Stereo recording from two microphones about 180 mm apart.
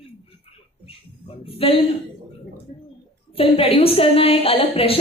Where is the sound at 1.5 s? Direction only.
30° left (ahead or behind).